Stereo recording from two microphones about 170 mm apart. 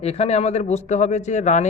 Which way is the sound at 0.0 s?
40° left (ahead or behind).